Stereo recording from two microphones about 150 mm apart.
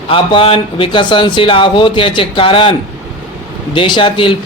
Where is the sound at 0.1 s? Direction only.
35° left (ahead or behind).